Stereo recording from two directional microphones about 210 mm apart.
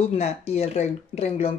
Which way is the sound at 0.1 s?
30° left (ahead or behind).